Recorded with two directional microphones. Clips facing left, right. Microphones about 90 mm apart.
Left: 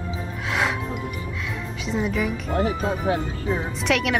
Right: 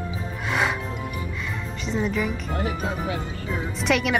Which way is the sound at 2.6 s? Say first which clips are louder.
Left 5 dB; 35° left (ahead or behind).